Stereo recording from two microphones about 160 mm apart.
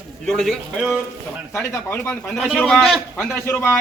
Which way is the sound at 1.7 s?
15° left (ahead or behind).